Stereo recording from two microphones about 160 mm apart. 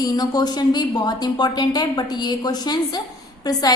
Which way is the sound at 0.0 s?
25° left (ahead or behind).